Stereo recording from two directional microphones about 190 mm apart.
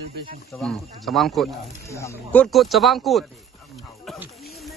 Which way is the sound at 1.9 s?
15° left (ahead or behind).